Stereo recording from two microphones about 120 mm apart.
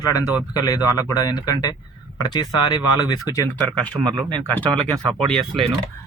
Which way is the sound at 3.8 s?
10° left (ahead or behind).